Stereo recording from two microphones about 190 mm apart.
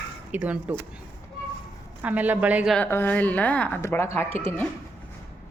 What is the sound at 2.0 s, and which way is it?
Speech, 10° right (ahead or behind).